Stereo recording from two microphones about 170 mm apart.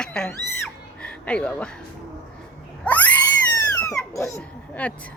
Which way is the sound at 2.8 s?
10° left (ahead or behind).